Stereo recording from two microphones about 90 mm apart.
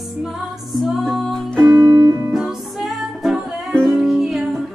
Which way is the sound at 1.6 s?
25° right (ahead or behind).